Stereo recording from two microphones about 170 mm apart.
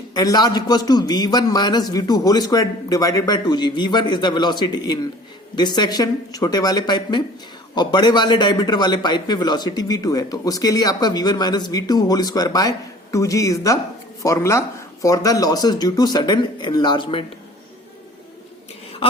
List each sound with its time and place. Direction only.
0.1 s a man's voice: 25° left (ahead or behind)